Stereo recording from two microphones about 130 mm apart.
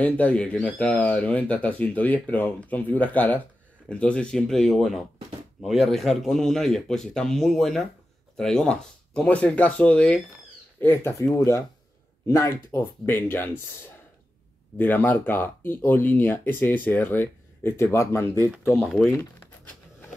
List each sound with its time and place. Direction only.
0.0 s speech: 10° left (ahead or behind)
14.8 s speech: 15° left (ahead or behind)
18.9 s speech: centre (ahead or behind)